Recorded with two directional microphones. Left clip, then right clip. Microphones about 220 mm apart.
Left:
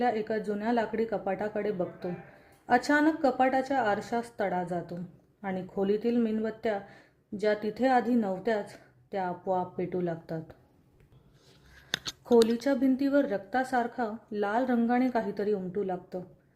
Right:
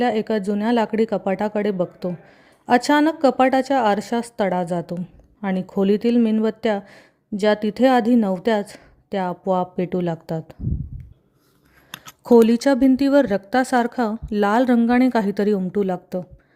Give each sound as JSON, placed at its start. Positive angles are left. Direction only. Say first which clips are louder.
{"t": 0.0, "sound": "a woman's voice", "louder": "right 8 dB", "side_deg": -40}
{"t": 12.5, "sound": "a woman's voice", "louder": "right 10 dB", "side_deg": -35}